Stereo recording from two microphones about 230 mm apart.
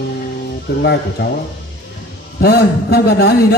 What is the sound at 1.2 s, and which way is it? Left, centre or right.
Speech, left.